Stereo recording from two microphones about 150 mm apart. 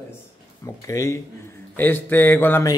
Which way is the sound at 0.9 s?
20° left (ahead or behind).